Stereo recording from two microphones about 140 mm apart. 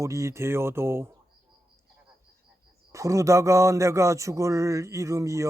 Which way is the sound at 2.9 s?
20° right (ahead or behind).